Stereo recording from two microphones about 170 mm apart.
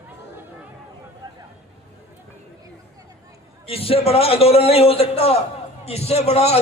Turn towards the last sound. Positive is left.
turn(degrees=40)  # may be behind; listen again after turning